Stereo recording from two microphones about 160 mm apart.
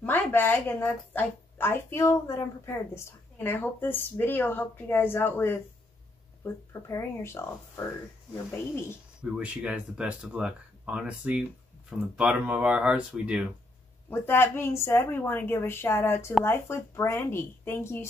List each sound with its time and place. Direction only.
0.0 s a woman's voice: 10° left (ahead or behind)
9.2 s speech: 5° right (ahead or behind)
14.1 s a woman's voice: 15° left (ahead or behind)